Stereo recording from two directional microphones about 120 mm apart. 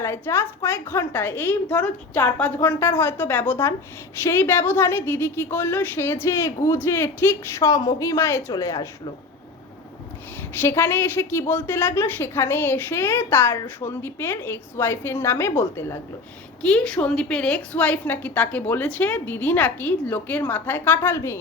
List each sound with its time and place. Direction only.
0.0 s a woman's voice: 20° left (ahead or behind)
10.6 s a woman's voice: 20° left (ahead or behind)
16.6 s a woman's voice: 10° left (ahead or behind)